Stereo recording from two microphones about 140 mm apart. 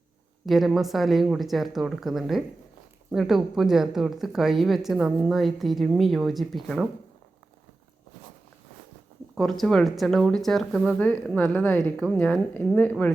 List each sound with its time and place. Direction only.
0.4 s speech: centre (ahead or behind)
9.3 s a woman's voice: centre (ahead or behind)